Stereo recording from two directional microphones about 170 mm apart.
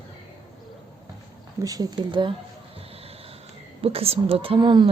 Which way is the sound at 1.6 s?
20° right (ahead or behind).